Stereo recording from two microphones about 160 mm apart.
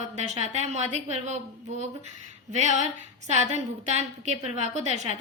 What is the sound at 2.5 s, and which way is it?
A woman's voice, 45° right (ahead or behind).